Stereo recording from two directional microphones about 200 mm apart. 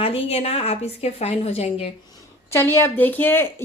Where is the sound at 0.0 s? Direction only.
30° left (ahead or behind).